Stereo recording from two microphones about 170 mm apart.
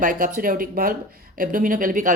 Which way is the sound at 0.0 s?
55° right (ahead or behind).